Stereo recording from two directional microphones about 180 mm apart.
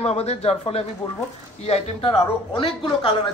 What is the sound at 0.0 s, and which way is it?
Speech, 35° left (ahead or behind).